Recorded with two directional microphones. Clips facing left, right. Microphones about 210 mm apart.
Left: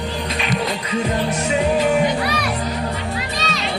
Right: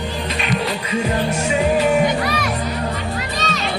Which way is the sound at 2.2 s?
45° right (ahead or behind).